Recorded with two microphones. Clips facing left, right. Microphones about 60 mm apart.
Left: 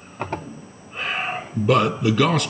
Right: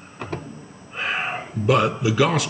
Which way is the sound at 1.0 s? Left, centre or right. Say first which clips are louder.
Right 1 dB; centre.